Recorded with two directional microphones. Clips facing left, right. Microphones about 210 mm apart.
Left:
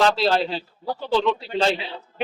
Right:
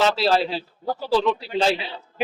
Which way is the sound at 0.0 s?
5° right (ahead or behind).